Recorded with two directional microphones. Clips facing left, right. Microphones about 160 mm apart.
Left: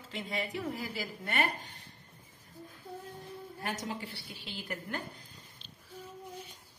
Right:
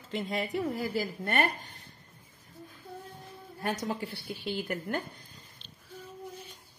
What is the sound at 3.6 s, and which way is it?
Speech, 50° right (ahead or behind).